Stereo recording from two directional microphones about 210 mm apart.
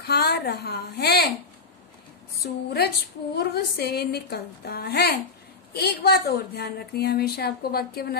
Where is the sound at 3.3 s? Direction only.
50° left (ahead or behind).